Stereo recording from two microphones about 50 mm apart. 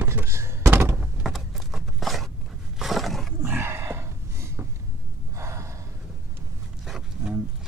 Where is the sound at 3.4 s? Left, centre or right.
Right.